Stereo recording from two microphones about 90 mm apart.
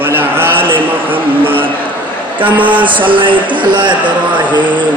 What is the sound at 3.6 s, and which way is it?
Speech, 60° right (ahead or behind).